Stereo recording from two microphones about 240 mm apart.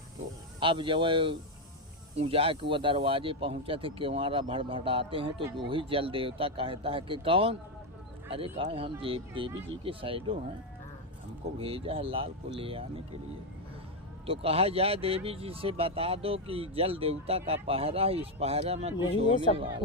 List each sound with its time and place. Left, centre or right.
0.6 s speech: right
11.6 s speech: right
14.3 s speech: right